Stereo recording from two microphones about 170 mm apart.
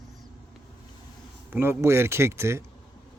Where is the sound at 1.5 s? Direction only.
15° right (ahead or behind).